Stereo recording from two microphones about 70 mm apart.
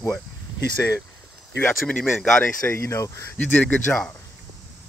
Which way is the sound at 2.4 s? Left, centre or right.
Left.